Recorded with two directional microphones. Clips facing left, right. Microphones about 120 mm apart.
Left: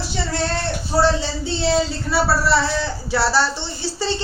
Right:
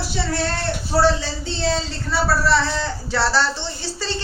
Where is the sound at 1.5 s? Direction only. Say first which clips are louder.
Left 4 dB; 10° left (ahead or behind).